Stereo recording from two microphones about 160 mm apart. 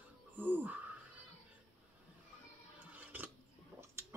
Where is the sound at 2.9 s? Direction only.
10° right (ahead or behind).